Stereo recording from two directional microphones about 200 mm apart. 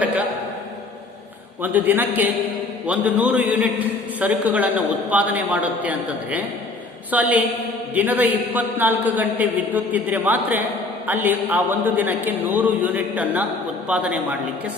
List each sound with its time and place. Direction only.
1.6 s a man's voice: 10° right (ahead or behind)